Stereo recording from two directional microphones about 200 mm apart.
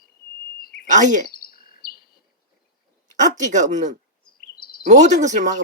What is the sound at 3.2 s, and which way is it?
Speech, 40° right (ahead or behind).